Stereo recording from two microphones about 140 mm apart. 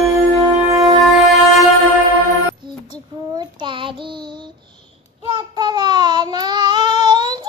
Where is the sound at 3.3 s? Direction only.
35° right (ahead or behind).